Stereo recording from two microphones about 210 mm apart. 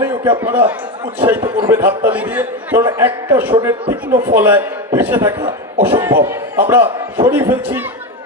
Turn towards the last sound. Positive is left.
turn(degrees=-10)  # may be behind; listen again after turning